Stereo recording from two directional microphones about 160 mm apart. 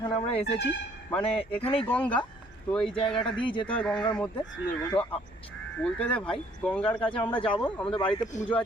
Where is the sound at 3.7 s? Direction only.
5° left (ahead or behind).